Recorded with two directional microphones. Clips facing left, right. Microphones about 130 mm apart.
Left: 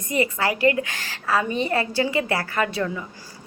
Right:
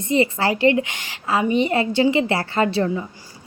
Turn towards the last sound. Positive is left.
turn(degrees=-30)  # may be behind; listen again after turning